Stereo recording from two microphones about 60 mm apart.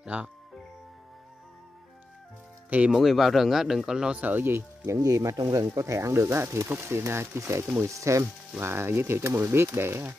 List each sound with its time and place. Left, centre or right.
0.0 s speech: right
2.9 s speech: centre
4.2 s speech: right
4.9 s speech: right